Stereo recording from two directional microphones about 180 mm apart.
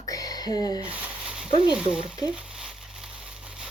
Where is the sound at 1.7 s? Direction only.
5° right (ahead or behind).